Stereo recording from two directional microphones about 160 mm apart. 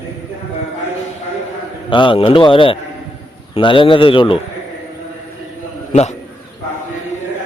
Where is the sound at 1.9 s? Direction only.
30° left (ahead or behind).